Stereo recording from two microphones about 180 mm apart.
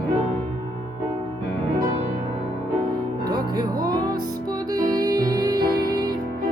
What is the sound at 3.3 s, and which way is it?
Music, 20° right (ahead or behind).